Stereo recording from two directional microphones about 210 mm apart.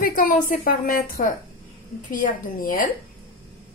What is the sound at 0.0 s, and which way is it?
A woman's voice, 40° left (ahead or behind).